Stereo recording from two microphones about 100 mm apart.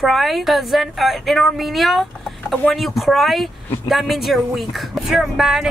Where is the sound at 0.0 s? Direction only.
Centre (ahead or behind).